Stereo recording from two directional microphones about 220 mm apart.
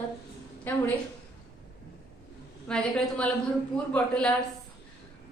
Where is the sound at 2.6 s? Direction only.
5° left (ahead or behind).